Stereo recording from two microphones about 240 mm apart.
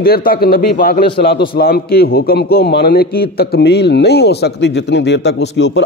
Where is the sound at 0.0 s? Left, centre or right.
Left.